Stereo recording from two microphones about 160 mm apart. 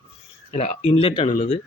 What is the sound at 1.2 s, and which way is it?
Speech, 50° left (ahead or behind).